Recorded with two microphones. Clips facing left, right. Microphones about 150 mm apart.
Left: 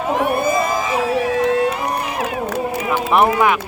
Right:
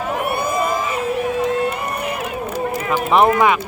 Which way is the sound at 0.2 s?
90° left.